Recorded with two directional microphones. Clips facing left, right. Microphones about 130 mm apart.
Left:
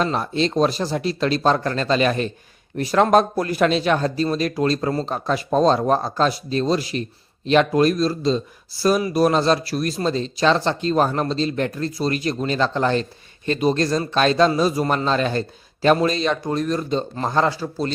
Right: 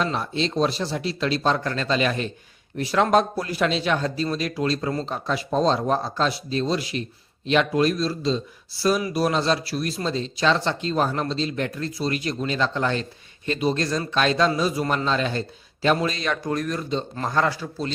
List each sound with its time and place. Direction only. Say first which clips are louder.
0.0 s speech: left 4 dB; 45° left (ahead or behind); by 17.7 s 25° left (ahead or behind)